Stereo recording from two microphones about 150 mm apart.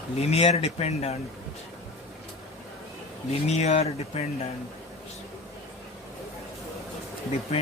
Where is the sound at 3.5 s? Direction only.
45° left (ahead or behind).